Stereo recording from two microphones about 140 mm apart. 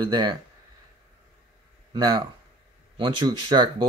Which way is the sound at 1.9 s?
30° right (ahead or behind).